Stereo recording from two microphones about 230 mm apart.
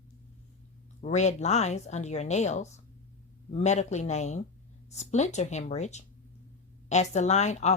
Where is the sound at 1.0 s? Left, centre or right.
Left.